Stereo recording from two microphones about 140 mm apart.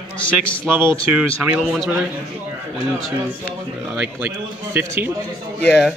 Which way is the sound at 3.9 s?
10° right (ahead or behind).